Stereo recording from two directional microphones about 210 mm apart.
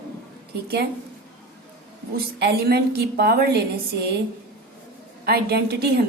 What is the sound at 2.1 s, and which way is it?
A woman's voice, 50° right (ahead or behind).